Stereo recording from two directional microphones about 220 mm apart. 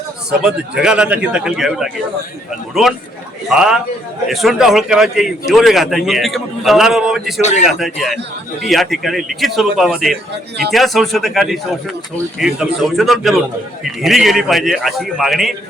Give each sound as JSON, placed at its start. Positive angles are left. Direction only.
{"t": 0.3, "sound": "a man's voice", "side_deg": -5}
{"t": 3.5, "sound": "a man's voice", "side_deg": -5}